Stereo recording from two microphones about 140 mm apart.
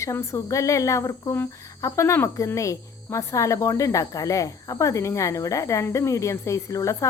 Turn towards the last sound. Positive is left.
turn(degrees=20)  # may be behind; listen again after turning